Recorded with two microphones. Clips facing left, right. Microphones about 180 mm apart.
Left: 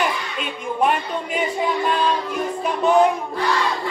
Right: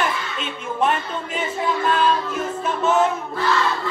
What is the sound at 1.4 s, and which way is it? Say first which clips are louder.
Music: left 1 dB; 15° left (ahead or behind).